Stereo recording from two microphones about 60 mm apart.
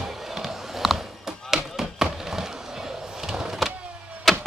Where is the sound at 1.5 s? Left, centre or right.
Centre.